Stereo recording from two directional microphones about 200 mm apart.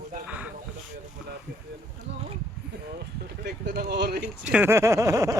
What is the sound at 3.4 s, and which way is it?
Speech, 55° right (ahead or behind).